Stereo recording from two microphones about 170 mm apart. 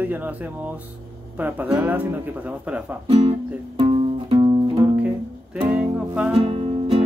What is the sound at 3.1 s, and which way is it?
Speech, 30° right (ahead or behind).